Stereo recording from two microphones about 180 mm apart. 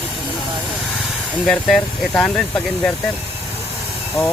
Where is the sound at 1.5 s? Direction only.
Centre (ahead or behind).